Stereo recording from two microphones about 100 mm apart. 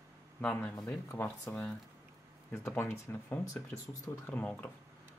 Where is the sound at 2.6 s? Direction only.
25° left (ahead or behind).